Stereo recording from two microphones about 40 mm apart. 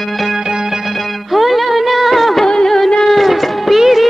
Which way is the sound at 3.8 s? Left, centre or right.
Centre.